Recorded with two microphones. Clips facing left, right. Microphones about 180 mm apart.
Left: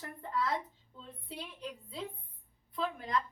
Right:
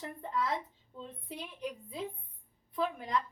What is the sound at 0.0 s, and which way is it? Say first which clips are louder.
Speech: right 1 dB; 20° right (ahead or behind).